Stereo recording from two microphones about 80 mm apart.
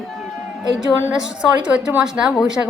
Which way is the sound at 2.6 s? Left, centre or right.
Right.